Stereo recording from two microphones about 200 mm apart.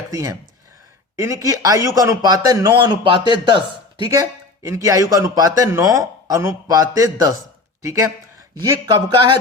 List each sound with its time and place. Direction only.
0.1 s speech: 15° right (ahead or behind)